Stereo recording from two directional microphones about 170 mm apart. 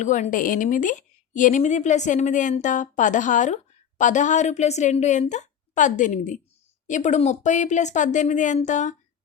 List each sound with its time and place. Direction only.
0.0 s a woman's voice: 45° left (ahead or behind)